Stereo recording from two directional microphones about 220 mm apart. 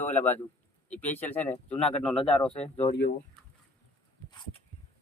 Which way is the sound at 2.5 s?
25° left (ahead or behind).